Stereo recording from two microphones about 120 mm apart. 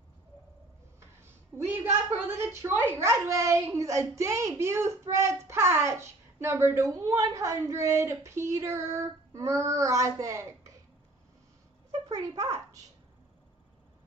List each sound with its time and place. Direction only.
1.7 s speech: 20° right (ahead or behind)
12.1 s speech: 30° right (ahead or behind)